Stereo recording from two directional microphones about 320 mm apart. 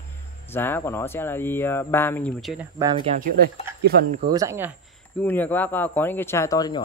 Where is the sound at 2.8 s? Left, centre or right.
Centre.